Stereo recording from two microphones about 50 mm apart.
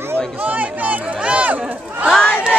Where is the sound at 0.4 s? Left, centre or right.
Right.